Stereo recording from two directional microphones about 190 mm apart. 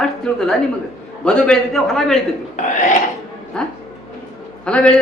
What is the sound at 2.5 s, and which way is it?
Speech, 40° left (ahead or behind).